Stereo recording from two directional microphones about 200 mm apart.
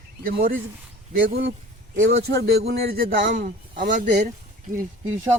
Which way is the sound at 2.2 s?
55° right (ahead or behind).